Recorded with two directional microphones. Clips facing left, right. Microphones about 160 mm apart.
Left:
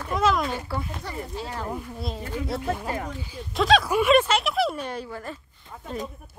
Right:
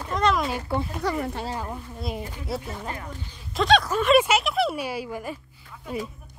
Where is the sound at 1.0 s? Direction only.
80° right.